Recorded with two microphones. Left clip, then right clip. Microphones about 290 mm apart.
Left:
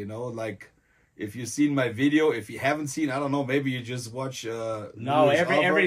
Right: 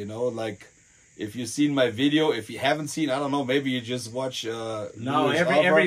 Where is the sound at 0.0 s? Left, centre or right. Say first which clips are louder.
Right 4 dB; centre.